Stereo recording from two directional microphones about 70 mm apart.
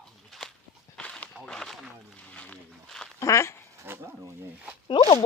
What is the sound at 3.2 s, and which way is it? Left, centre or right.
Speech, left.